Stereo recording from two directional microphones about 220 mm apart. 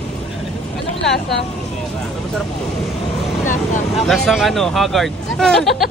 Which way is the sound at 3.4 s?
35° left (ahead or behind).